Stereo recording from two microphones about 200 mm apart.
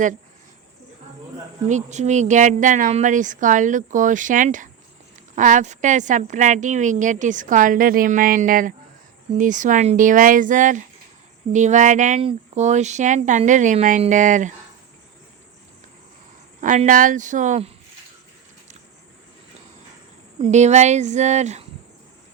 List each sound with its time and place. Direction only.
1.6 s a woman's voice: 35° right (ahead or behind)
16.6 s a woman's voice: 40° right (ahead or behind)
20.4 s a woman's voice: 35° right (ahead or behind)